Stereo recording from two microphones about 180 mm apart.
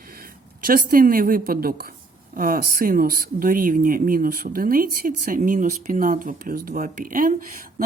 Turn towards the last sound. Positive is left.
turn(degrees=-50)  # may be behind; listen again after turning